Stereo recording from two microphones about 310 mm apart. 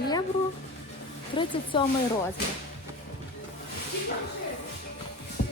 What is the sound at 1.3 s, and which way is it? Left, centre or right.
Speech, centre.